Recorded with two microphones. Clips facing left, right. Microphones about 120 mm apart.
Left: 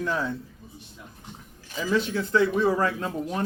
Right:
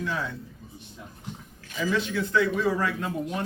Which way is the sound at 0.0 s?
40° left (ahead or behind).